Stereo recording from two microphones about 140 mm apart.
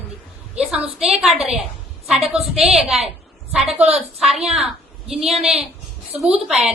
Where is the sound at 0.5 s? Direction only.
5° right (ahead or behind).